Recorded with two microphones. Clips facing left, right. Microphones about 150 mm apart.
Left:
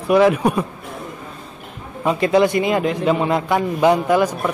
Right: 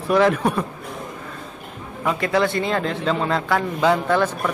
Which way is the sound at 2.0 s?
20° left (ahead or behind).